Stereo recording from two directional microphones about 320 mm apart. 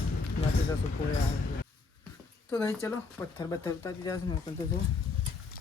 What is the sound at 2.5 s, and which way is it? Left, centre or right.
Speech, centre.